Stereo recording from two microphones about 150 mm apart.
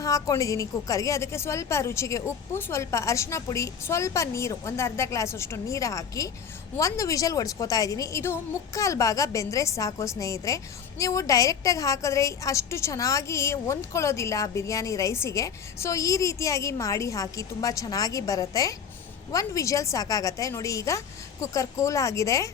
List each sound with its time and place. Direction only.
0.0 s a woman's voice: 20° left (ahead or behind)